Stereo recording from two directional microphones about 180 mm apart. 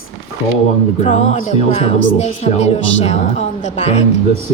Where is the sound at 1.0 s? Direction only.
40° left (ahead or behind).